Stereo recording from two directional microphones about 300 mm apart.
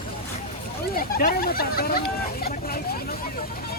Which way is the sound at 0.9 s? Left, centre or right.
Left.